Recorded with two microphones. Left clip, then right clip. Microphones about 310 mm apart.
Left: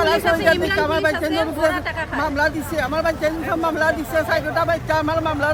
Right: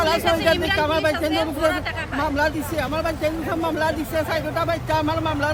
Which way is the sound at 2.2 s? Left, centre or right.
Centre.